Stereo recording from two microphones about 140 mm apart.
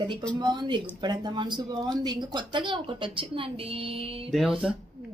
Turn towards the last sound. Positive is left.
turn(degrees=-5)  # may be behind; listen again after turning